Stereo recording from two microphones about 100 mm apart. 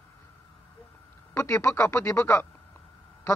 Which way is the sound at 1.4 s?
30° left (ahead or behind).